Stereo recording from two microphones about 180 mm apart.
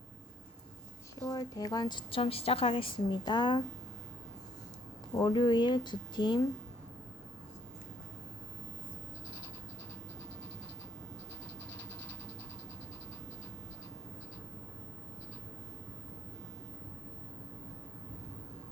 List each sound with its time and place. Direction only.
1.3 s a woman's voice: 20° left (ahead or behind)
5.1 s a woman's voice: 25° left (ahead or behind)